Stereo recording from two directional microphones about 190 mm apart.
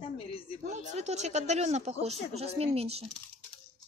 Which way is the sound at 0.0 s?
30° left (ahead or behind).